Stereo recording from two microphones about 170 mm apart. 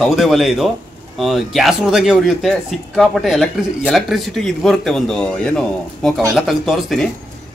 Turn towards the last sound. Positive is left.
turn(degrees=0)  # may be behind; listen again after turning